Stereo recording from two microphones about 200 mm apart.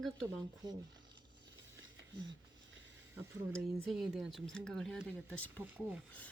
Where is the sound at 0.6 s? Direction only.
20° right (ahead or behind).